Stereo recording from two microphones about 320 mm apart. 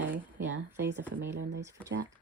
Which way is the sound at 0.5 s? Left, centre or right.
Right.